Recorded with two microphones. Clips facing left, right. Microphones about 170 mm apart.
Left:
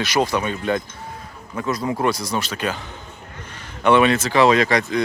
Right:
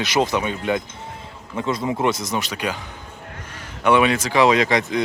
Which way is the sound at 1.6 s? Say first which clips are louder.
Even; 25° right (ahead or behind).